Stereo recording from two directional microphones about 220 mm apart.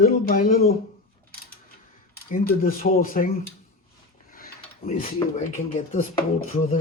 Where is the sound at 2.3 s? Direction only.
40° left (ahead or behind).